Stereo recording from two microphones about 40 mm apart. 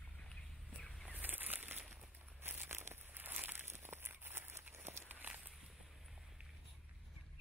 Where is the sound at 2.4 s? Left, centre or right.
Right.